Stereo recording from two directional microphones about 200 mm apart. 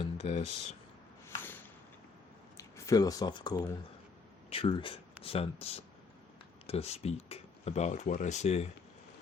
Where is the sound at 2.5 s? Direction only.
15° left (ahead or behind); by 8.7 s 30° left (ahead or behind).